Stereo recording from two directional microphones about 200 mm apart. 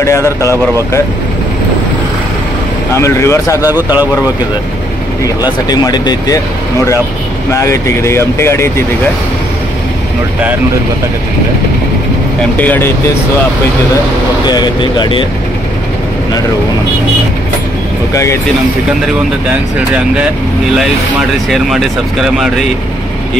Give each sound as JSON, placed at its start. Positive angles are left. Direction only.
{"t": 0.0, "sound": "speech", "side_deg": 15}
{"t": 2.9, "sound": "speech", "side_deg": 15}
{"t": 3.6, "sound": "speech", "side_deg": -10}
{"t": 5.2, "sound": "speech", "side_deg": 20}
{"t": 7.5, "sound": "speech", "side_deg": 15}
{"t": 12.5, "sound": "speech", "side_deg": 10}
{"t": 14.4, "sound": "speech", "side_deg": 20}
{"t": 18.1, "sound": "speech", "side_deg": 15}